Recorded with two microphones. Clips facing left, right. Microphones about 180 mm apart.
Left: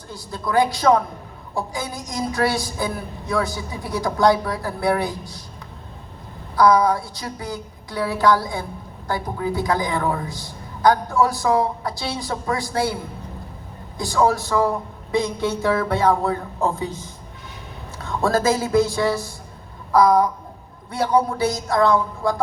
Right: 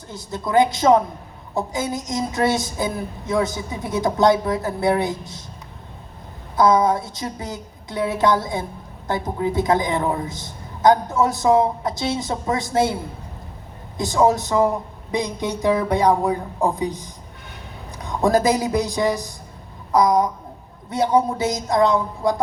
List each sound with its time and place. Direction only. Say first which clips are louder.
0.1 s a man's voice: right 2 dB; 20° right (ahead or behind)
6.6 s a man's voice: even; 20° right (ahead or behind)
14.0 s a woman's voice: right 2 dB; 20° right (ahead or behind)